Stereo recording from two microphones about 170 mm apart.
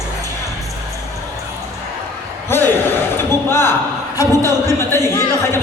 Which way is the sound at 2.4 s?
15° left (ahead or behind).